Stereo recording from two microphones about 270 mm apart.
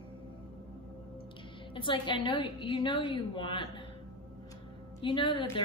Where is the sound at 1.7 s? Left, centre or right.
Centre.